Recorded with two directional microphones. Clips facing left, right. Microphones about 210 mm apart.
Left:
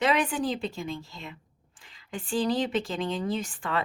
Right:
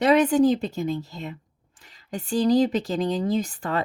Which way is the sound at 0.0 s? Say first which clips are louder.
Right 8 dB; 40° right (ahead or behind).